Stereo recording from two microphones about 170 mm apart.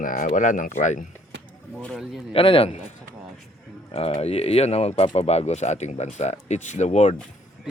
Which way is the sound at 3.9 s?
35° left (ahead or behind).